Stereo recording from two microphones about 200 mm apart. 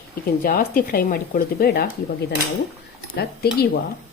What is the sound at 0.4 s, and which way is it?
A woman's voice, 45° left (ahead or behind).